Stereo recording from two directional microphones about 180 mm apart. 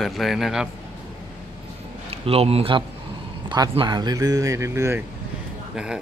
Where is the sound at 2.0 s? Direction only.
35° right (ahead or behind); by 5.0 s 15° right (ahead or behind).